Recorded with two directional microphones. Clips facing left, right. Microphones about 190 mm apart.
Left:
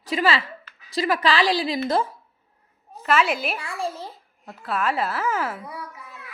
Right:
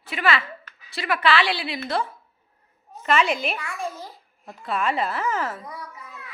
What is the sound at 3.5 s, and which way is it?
Speech, 30° left (ahead or behind).